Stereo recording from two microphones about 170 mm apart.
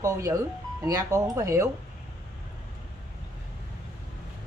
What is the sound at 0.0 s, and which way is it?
A woman's voice, 20° right (ahead or behind).